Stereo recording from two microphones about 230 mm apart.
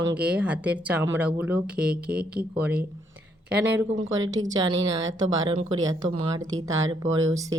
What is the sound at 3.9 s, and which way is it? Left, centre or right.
Speech, right.